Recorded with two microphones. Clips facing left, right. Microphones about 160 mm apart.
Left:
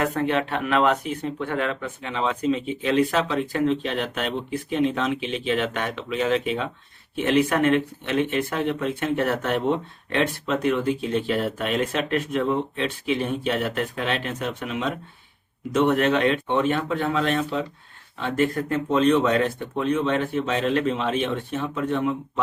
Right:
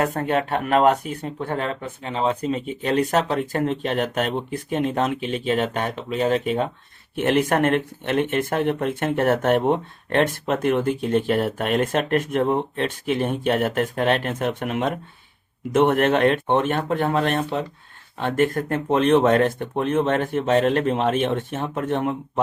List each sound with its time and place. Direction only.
0.0 s speech: 40° right (ahead or behind)
7.2 s speech: 55° right (ahead or behind)